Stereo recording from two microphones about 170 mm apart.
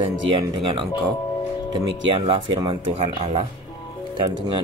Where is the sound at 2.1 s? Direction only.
35° right (ahead or behind).